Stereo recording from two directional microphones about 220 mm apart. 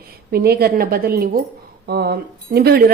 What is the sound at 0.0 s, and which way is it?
A woman's voice, 45° right (ahead or behind).